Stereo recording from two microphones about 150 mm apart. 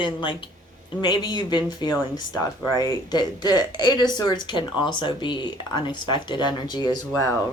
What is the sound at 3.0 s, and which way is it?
Speech, 30° left (ahead or behind).